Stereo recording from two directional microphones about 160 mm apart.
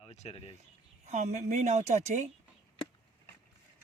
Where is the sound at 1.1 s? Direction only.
45° right (ahead or behind).